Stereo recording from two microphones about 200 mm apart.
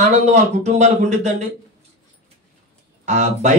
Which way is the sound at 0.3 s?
35° right (ahead or behind).